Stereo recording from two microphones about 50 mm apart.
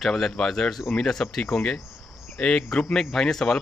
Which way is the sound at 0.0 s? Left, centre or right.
Centre.